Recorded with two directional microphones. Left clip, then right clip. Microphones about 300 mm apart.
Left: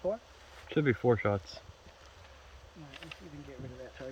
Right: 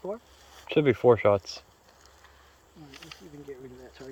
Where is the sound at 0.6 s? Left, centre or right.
Right.